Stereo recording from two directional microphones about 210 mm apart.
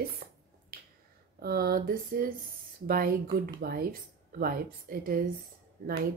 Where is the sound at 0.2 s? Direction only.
50° right (ahead or behind).